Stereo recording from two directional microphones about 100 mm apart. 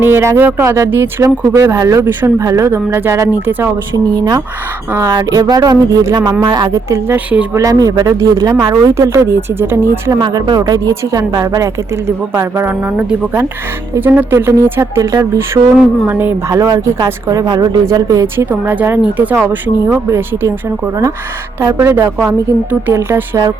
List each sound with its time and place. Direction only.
0.0 s speech: 25° right (ahead or behind)
3.9 s speech: 40° right (ahead or behind); by 10.0 s 25° right (ahead or behind)
10.1 s speech: 45° right (ahead or behind); by 16.3 s 20° right (ahead or behind)
16.5 s speech: 35° right (ahead or behind)
18.3 s speech: 20° right (ahead or behind)